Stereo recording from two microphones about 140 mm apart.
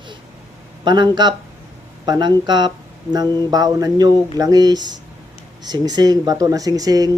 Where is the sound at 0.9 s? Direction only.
35° right (ahead or behind).